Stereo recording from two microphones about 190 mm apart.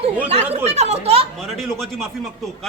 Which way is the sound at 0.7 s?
35° right (ahead or behind).